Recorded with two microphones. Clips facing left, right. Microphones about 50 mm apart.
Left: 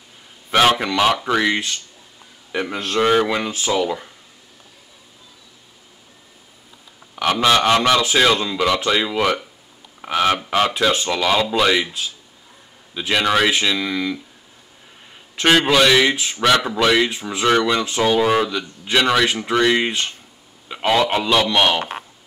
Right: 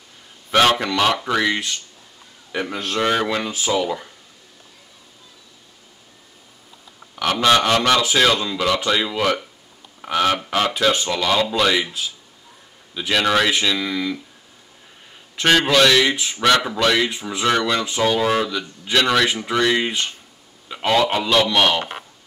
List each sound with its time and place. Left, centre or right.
0.5 s speech: centre
7.2 s a man's voice: centre
12.9 s speech: centre
15.3 s a man's voice: centre